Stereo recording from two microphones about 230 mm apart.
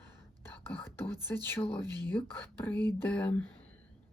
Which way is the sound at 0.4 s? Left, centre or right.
Centre.